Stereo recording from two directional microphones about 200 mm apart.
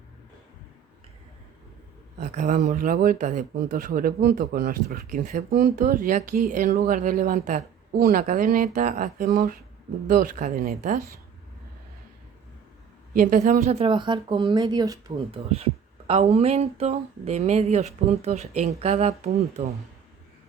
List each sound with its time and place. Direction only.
2.1 s speech: 40° right (ahead or behind)
13.1 s speech: 40° right (ahead or behind); by 15.1 s 20° right (ahead or behind)
15.3 s speech: 30° right (ahead or behind)